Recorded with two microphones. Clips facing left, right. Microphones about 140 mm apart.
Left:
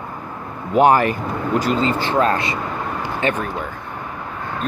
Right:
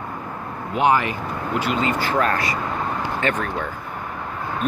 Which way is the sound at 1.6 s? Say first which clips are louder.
Left 3 dB; 35° left (ahead or behind).